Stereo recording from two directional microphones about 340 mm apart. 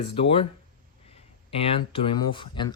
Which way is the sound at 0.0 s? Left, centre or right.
Centre.